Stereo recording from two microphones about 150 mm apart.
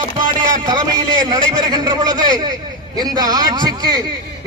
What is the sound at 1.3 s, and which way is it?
Speech, 30° right (ahead or behind).